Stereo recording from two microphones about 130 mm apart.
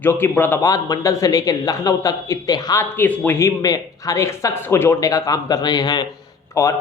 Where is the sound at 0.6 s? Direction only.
25° left (ahead or behind).